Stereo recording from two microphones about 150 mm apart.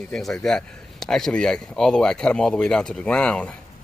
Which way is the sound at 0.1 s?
5° left (ahead or behind).